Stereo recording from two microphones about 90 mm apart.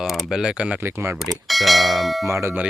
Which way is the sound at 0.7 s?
30° right (ahead or behind).